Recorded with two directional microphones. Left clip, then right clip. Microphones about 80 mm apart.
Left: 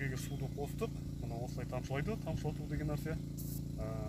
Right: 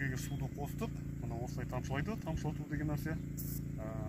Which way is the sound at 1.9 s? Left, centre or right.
Left.